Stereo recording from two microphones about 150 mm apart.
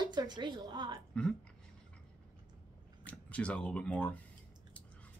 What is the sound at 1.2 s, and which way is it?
Speech, 5° left (ahead or behind).